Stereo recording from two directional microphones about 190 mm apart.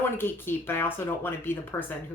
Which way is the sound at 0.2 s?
10° left (ahead or behind).